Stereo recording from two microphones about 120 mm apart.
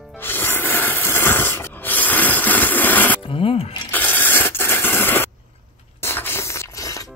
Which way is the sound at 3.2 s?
50° left (ahead or behind).